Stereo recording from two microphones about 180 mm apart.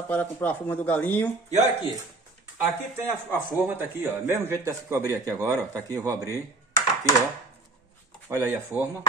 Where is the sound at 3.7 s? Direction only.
10° right (ahead or behind).